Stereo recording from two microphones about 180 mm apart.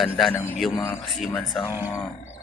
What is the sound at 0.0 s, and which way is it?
Speech, centre (ahead or behind).